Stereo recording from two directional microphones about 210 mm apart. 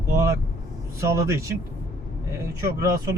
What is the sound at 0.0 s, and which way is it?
Vehicle, 15° right (ahead or behind).